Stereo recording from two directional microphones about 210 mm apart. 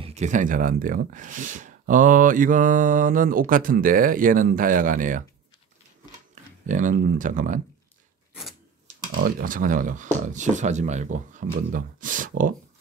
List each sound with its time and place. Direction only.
0.0 s speech: 30° right (ahead or behind)
6.6 s speech: 40° right (ahead or behind)
8.8 s speech: 40° right (ahead or behind)